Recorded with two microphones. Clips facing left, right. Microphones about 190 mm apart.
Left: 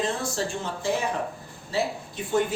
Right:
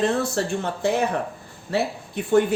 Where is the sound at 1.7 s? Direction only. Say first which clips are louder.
Right 3 dB; 60° right (ahead or behind).